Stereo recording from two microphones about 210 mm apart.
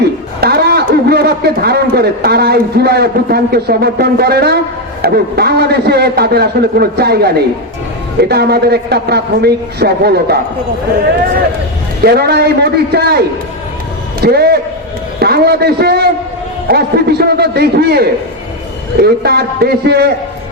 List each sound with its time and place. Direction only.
0.3 s a man's voice: 50° right (ahead or behind)
12.0 s a man's voice: 50° right (ahead or behind)